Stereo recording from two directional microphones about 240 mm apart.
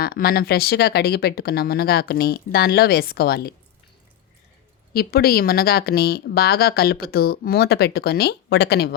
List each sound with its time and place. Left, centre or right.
0.0 s speech: left
4.9 s speech: left